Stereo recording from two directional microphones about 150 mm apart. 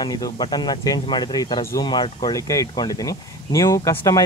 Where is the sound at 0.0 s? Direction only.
25° left (ahead or behind).